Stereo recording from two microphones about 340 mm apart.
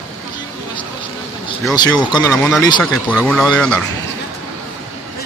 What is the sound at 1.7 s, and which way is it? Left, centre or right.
Speech, centre.